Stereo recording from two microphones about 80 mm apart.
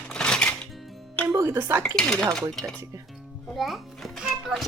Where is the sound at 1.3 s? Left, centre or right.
Right.